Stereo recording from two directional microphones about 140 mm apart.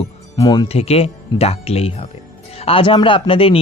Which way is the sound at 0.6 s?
45° left (ahead or behind).